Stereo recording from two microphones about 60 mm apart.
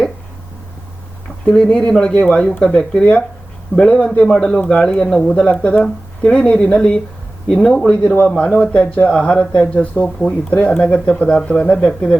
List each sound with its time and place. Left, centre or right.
1.5 s speech: centre
5.3 s speech: left
8.3 s speech: centre